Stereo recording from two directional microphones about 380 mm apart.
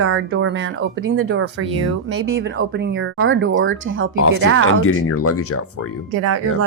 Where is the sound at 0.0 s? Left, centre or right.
Right.